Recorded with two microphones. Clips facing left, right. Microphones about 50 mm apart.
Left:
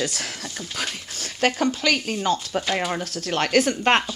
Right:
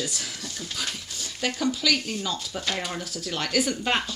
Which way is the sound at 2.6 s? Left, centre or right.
Centre.